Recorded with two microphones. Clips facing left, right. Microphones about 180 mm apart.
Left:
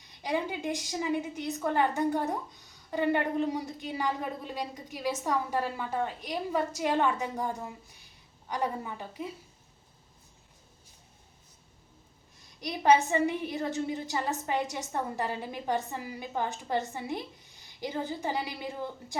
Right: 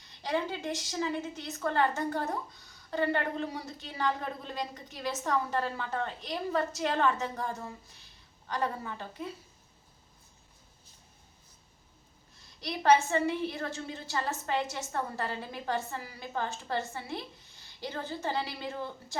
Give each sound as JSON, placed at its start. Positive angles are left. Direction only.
{"t": 0.0, "sound": "a woman's voice", "side_deg": 15}
{"t": 12.5, "sound": "a woman's voice", "side_deg": 15}